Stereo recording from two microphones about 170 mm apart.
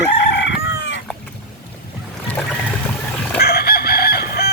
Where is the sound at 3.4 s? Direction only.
65° left (ahead or behind).